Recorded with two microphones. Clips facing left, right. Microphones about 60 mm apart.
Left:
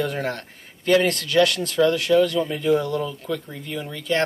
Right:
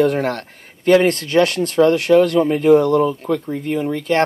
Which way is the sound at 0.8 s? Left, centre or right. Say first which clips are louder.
Right 6 dB; right.